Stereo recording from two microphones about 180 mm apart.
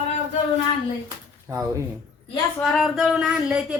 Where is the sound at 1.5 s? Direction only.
15° right (ahead or behind).